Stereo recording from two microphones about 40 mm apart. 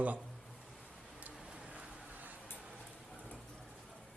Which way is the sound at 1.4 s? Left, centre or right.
Right.